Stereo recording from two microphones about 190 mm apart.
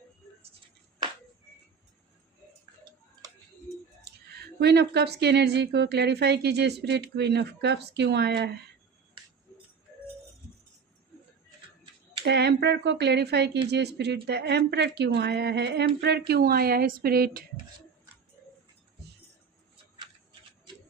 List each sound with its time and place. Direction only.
4.0 s a woman's voice: 60° right (ahead or behind)
12.2 s a woman's voice: 60° right (ahead or behind)